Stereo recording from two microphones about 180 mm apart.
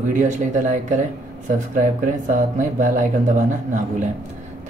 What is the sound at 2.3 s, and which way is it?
Speech, 45° right (ahead or behind).